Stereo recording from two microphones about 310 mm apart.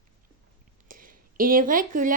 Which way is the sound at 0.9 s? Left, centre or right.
Right.